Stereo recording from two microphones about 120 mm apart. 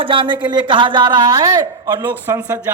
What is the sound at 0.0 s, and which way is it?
Speech, 45° right (ahead or behind).